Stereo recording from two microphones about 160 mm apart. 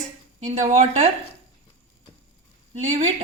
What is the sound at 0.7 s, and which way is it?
Speech, 45° right (ahead or behind).